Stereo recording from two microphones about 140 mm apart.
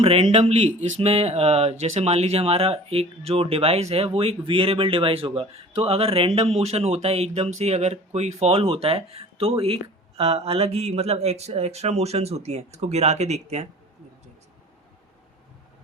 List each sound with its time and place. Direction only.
0.0 s speech: 45° right (ahead or behind)